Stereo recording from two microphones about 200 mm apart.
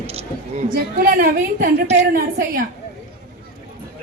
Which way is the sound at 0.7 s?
50° right (ahead or behind).